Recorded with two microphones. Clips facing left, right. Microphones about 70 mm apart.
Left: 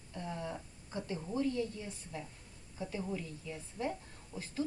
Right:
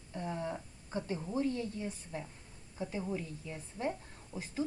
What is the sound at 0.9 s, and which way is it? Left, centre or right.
Speech, right.